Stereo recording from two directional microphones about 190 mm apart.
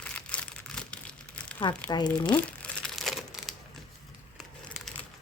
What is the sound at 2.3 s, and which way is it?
Crumpling, 5° left (ahead or behind).